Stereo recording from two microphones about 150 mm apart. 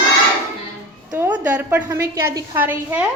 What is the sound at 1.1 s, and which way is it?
A woman's voice, 15° right (ahead or behind).